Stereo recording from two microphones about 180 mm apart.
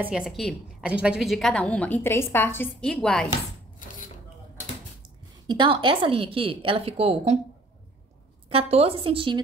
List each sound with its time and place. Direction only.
0.0 s a woman's voice: 5° right (ahead or behind)
5.0 s a woman's voice: 25° right (ahead or behind)
8.5 s a woman's voice: 35° right (ahead or behind)